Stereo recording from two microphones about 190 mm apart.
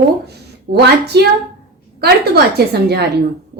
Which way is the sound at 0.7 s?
60° right (ahead or behind).